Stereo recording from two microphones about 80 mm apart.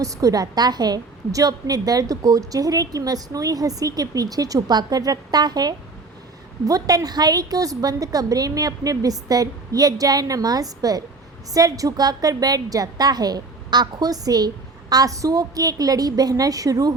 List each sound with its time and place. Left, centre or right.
0.0 s a woman's voice: right